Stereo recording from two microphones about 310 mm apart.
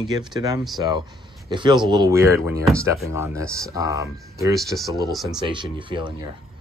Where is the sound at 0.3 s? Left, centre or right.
Centre.